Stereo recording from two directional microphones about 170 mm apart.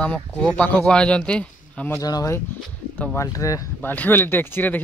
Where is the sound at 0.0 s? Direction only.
5° left (ahead or behind).